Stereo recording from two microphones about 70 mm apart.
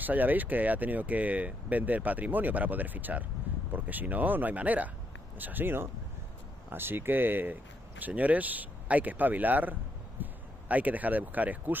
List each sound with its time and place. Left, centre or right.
0.0 s speech: right
10.2 s a sound: right
10.7 s speech: right